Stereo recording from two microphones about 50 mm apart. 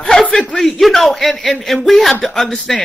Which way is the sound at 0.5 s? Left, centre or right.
Centre.